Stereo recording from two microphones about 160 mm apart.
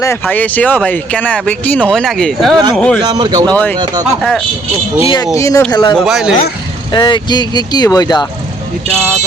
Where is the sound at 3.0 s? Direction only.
25° right (ahead or behind).